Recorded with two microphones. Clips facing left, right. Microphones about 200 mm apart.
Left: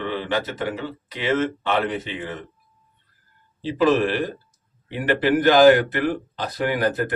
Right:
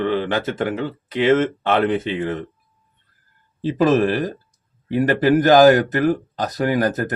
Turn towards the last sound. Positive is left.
turn(degrees=-45)  # may be behind; listen again after turning